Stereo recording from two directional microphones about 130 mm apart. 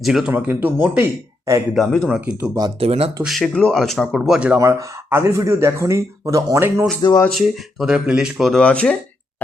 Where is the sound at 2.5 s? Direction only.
30° right (ahead or behind).